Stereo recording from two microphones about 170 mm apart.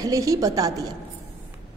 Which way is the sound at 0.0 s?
20° right (ahead or behind).